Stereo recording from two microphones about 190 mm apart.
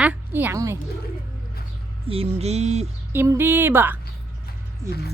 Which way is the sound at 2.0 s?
30° right (ahead or behind).